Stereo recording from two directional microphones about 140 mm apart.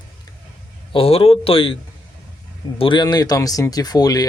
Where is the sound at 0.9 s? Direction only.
45° left (ahead or behind).